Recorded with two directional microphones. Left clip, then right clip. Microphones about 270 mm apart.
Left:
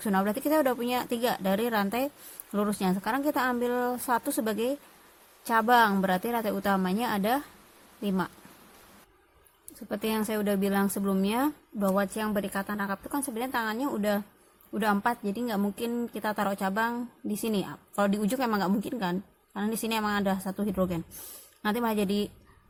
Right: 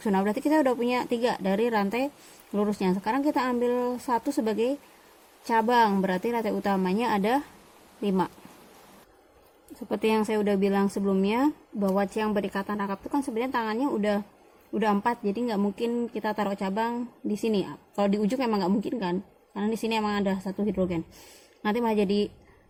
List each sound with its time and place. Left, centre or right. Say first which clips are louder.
0.0 s a woman's voice: right 2 dB; left
9.9 s a woman's voice: right 5 dB; left